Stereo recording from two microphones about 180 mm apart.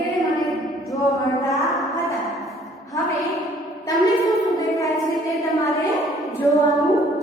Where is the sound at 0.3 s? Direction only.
Centre (ahead or behind).